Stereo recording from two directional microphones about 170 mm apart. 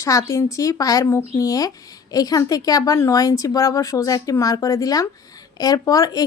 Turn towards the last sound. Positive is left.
turn(degrees=20)  # may be behind; listen again after turning